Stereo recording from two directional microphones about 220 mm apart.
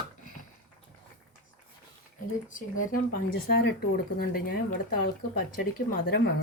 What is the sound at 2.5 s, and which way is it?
Speech, 35° left (ahead or behind).